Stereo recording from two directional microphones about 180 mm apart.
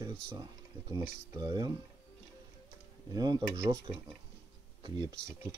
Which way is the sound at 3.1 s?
20° right (ahead or behind).